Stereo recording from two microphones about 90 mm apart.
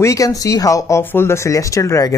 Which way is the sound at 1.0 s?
25° left (ahead or behind).